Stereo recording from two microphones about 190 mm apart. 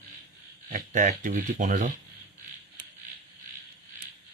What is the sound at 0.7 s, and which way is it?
Speech, 45° right (ahead or behind).